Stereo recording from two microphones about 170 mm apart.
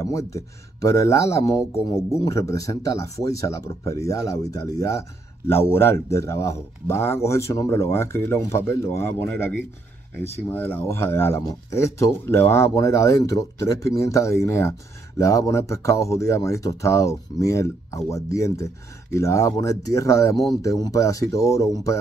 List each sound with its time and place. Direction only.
0.0 s speech: 20° left (ahead or behind)